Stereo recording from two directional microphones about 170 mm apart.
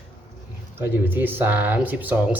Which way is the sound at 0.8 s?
10° right (ahead or behind).